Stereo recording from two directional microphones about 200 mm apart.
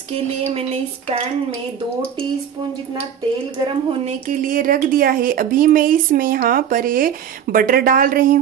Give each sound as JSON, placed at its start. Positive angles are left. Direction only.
{"t": 0.1, "sound": "speech", "side_deg": -30}
{"t": 4.0, "sound": "speech", "side_deg": -35}